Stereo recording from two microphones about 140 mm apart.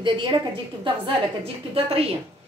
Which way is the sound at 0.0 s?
35° right (ahead or behind).